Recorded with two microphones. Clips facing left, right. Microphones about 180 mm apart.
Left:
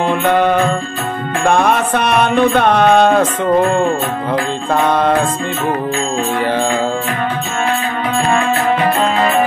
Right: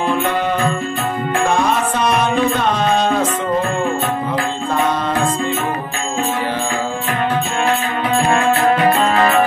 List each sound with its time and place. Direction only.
0.0 s music: 60° left (ahead or behind)